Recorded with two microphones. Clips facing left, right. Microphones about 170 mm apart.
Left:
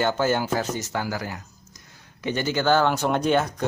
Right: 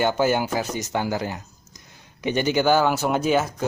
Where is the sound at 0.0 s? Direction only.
15° right (ahead or behind).